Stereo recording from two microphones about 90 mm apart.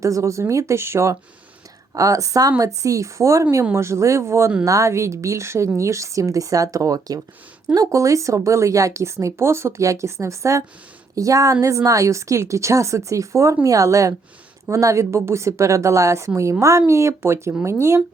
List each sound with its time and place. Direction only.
0.0 s a woman's voice: 35° right (ahead or behind)